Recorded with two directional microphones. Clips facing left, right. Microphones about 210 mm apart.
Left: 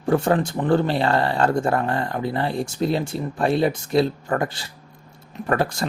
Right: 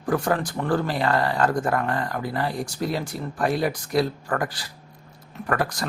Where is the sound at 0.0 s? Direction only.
25° left (ahead or behind).